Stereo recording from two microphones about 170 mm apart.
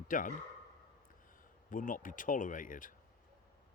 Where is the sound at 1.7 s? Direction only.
50° left (ahead or behind).